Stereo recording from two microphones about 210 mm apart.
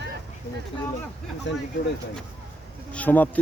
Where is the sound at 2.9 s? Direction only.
5° left (ahead or behind).